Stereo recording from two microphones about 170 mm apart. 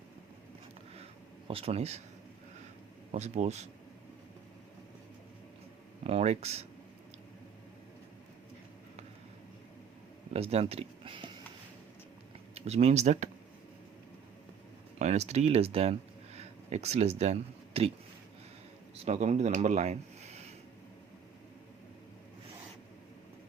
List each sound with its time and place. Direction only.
1.5 s speech: 35° right (ahead or behind)
3.1 s speech: 40° right (ahead or behind)
6.1 s speech: 40° right (ahead or behind)
10.3 s speech: 35° right (ahead or behind)
12.5 s speech: 40° right (ahead or behind)
14.9 s speech: 40° right (ahead or behind)
19.0 s speech: 40° right (ahead or behind)